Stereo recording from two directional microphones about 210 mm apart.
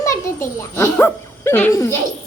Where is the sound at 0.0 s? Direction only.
15° left (ahead or behind).